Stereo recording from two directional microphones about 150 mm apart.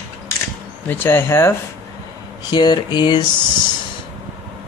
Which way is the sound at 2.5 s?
30° left (ahead or behind).